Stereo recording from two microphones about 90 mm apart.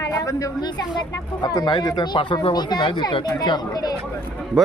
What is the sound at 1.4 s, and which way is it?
Speech, 55° left (ahead or behind).